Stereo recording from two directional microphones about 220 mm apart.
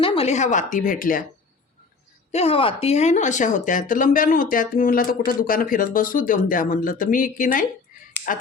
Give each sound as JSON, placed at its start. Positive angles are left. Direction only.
{"t": 0.0, "sound": "speech", "side_deg": 25}
{"t": 2.3, "sound": "speech", "side_deg": 25}